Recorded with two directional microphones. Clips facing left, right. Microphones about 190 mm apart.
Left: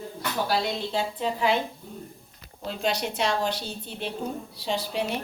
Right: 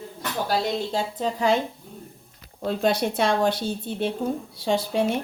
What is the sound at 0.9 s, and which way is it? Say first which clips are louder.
Speech: right 2 dB; 45° right (ahead or behind).